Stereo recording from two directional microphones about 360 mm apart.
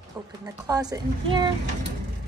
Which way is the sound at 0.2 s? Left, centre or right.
Centre.